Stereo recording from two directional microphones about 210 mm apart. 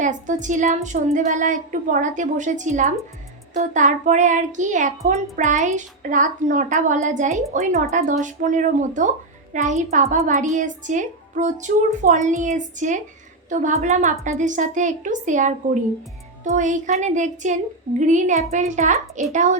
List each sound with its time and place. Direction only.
0.0 s speech: 35° right (ahead or behind)